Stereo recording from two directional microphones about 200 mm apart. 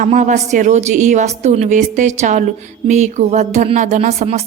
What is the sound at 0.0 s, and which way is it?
Speech, 40° right (ahead or behind).